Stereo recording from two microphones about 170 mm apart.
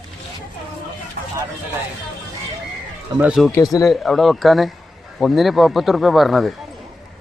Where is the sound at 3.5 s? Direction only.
20° left (ahead or behind).